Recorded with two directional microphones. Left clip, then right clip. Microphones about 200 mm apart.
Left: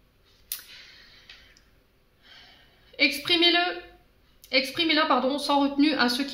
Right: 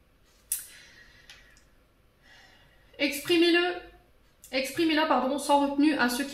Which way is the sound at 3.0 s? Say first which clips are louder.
Left 3 dB; 40° left (ahead or behind).